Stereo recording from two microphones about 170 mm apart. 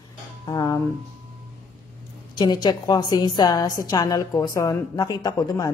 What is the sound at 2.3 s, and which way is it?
A woman's voice, 25° left (ahead or behind).